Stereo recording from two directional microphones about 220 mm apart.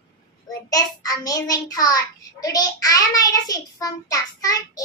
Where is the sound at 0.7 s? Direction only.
15° left (ahead or behind).